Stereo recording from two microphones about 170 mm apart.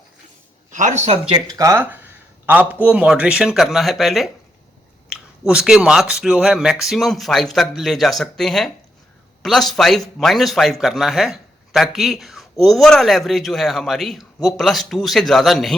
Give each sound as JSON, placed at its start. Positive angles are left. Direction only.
{"t": 0.7, "sound": "a man's voice", "side_deg": -45}
{"t": 1.3, "sound": "speech", "side_deg": -20}